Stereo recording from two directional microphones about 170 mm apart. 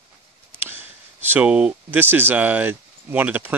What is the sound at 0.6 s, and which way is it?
Speech, 10° right (ahead or behind).